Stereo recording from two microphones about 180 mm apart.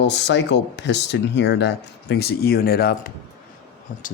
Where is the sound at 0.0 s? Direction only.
75° left (ahead or behind); by 3.1 s 55° left (ahead or behind).